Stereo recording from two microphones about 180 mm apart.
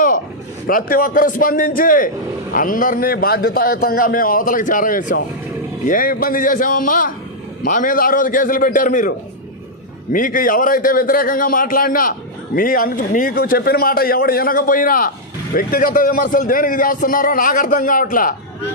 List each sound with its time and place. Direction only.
0.7 s a man's voice: 50° left (ahead or behind)